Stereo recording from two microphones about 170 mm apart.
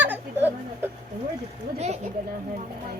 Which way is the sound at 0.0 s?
10° right (ahead or behind).